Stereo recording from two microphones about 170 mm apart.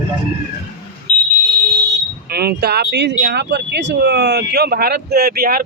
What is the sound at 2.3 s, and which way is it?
Speech, 70° right (ahead or behind).